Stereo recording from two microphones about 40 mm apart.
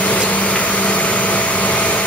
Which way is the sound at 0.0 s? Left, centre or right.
Left.